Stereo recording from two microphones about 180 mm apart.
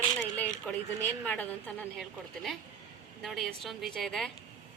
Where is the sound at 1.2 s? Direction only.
10° left (ahead or behind).